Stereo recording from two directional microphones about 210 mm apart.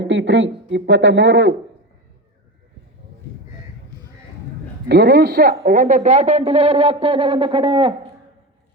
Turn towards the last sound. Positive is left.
turn(degrees=-25)  # may be behind; listen again after turning